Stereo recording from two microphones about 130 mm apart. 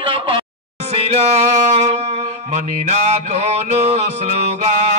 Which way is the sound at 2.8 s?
60° right (ahead or behind).